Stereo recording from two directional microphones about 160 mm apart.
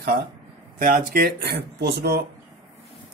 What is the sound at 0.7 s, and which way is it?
Speech, 60° right (ahead or behind).